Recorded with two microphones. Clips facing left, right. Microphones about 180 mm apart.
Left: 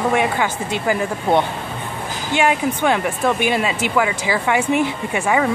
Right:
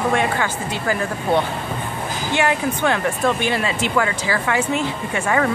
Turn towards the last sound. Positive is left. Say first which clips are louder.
# left 1 dB
turn(degrees=10)  # may be behind; listen again after turning